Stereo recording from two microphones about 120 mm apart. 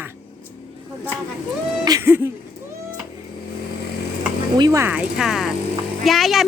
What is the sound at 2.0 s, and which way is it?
Speech, 20° right (ahead or behind).